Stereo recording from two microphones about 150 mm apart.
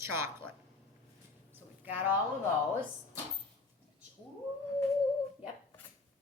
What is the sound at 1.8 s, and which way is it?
Speech, 10° right (ahead or behind).